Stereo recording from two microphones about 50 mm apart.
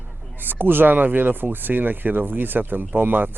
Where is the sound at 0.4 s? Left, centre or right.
Right.